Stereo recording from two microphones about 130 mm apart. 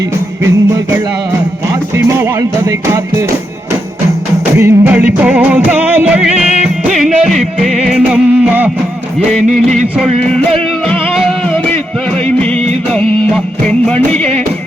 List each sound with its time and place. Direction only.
2.0 s music: 20° right (ahead or behind)
4.5 s music: 15° right (ahead or behind); by 8.0 s centre (ahead or behind)
8.0 s music: 10° right (ahead or behind)
9.3 s music: 5° left (ahead or behind)
12.9 s music: 5° left (ahead or behind)